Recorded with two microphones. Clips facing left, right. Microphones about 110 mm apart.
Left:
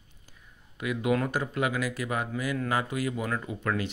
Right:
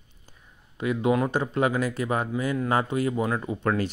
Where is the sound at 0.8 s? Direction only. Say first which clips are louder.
Right 4 dB; 30° right (ahead or behind).